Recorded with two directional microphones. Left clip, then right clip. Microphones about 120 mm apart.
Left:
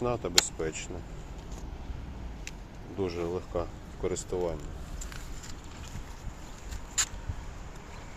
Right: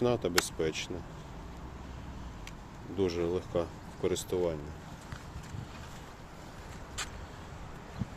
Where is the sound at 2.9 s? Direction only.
40° right (ahead or behind).